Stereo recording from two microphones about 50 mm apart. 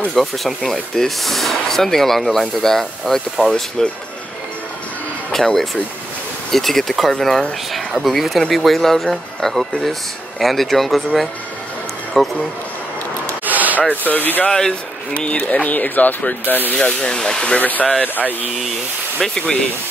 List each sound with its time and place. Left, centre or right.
0.1 s speech: centre
5.3 s speech: centre
12.2 s speech: centre
13.5 s rub: right
14.0 s speech: left
14.5 s speech: centre
15.1 s speech: left
16.7 s speech: left
17.6 s speech: left
19.3 s speech: centre